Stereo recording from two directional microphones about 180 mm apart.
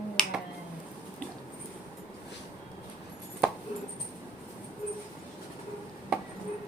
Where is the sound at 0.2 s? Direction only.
5° left (ahead or behind).